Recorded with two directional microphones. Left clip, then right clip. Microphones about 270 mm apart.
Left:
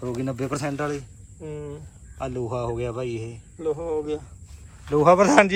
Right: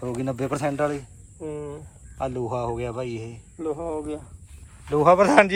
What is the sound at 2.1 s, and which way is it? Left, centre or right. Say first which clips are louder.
Speech: right 1 dB; centre.